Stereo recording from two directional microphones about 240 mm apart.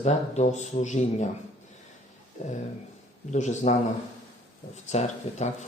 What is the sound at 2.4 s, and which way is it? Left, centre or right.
Speech, left.